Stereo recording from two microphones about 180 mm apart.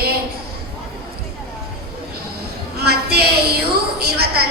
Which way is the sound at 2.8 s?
60° right (ahead or behind).